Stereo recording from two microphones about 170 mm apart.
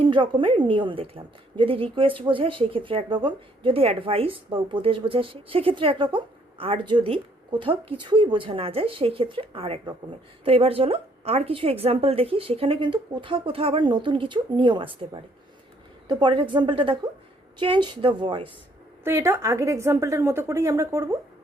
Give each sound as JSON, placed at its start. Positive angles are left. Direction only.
{"t": 0.0, "sound": "a woman's voice", "side_deg": -30}
{"t": 19.0, "sound": "a woman's voice", "side_deg": -15}